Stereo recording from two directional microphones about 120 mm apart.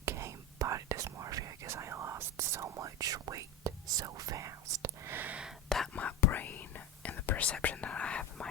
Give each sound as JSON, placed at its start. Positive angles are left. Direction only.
{"t": 0.0, "sound": "whispering", "side_deg": -20}
{"t": 5.1, "sound": "a sound", "side_deg": -15}
{"t": 5.6, "sound": "whispering", "side_deg": 5}